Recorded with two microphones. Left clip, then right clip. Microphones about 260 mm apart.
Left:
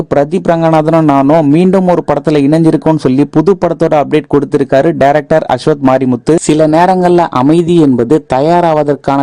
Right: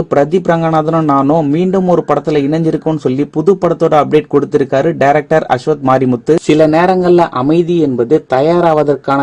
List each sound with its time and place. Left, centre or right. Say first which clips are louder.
0.1 s a man's voice: left 1 dB; left